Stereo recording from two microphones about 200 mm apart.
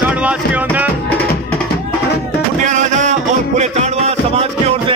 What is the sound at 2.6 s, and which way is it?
Music, 40° right (ahead or behind).